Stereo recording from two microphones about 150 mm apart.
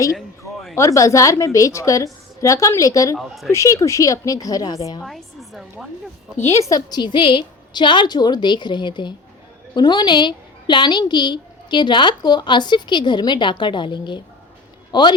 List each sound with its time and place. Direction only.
0.2 s a sound: centre (ahead or behind)
0.8 s a woman's voice: 20° left (ahead or behind)
3.2 s a woman's voice: centre (ahead or behind)
3.5 s a woman's voice: 20° left (ahead or behind)
5.0 s a woman's voice: centre (ahead or behind)
6.3 s a woman's voice: 20° left (ahead or behind)